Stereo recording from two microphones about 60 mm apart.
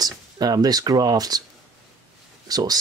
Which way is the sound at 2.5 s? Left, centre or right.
Right.